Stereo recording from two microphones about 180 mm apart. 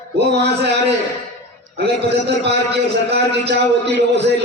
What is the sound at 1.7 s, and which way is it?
A man's voice, 70° right (ahead or behind).